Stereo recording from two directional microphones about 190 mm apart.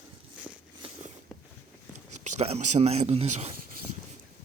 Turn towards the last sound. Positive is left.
turn(degrees=-35)  # may be behind; listen again after turning